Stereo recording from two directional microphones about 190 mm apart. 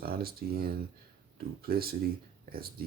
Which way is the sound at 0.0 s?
55° right (ahead or behind).